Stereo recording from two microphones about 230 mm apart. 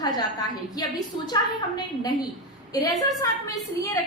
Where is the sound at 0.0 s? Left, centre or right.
Centre.